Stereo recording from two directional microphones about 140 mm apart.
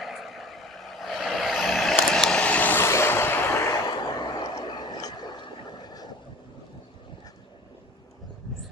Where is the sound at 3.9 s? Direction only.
30° left (ahead or behind).